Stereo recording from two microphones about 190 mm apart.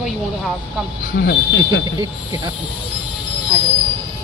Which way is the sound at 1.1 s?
65° left (ahead or behind).